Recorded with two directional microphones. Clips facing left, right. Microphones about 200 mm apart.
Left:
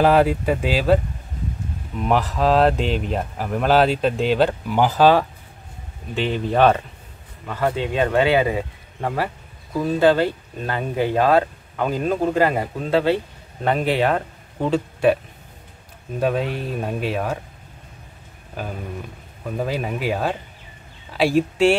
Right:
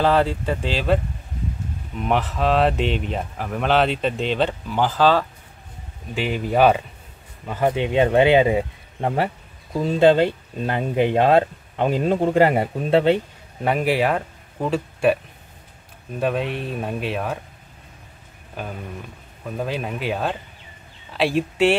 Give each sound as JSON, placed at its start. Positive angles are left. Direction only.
{"t": 0.0, "sound": "speech", "side_deg": 10}
{"t": 2.0, "sound": "speech", "side_deg": 0}
{"t": 6.1, "sound": "speech", "side_deg": -5}
{"t": 7.4, "sound": "speech", "side_deg": -20}
{"t": 13.7, "sound": "speech", "side_deg": -10}
{"t": 16.2, "sound": "speech", "side_deg": 0}
{"t": 19.4, "sound": "speech", "side_deg": 0}